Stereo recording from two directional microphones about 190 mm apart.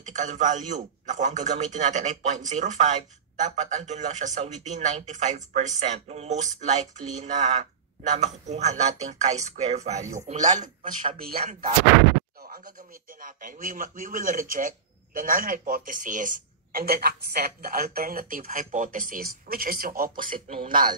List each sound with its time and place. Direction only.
0.0 s music: 40° right (ahead or behind)
13.2 s a man's voice: 45° right (ahead or behind)